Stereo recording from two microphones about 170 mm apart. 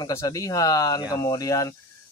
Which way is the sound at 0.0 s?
20° left (ahead or behind).